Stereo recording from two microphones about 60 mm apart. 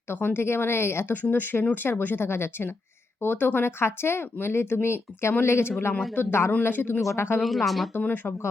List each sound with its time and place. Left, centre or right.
0.1 s speech: left
7.4 s speech: centre
7.9 s speech: left